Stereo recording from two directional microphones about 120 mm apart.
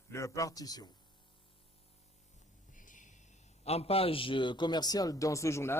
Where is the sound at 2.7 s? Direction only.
90° left.